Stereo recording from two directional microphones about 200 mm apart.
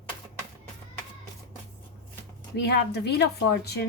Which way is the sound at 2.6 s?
55° left (ahead or behind).